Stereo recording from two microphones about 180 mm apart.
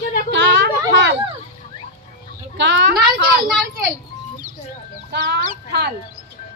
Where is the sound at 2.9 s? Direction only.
55° right (ahead or behind).